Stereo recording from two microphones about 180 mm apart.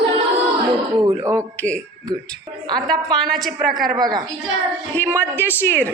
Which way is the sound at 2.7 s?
5° left (ahead or behind).